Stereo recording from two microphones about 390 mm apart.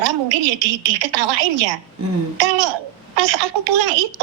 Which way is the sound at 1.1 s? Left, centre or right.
Right.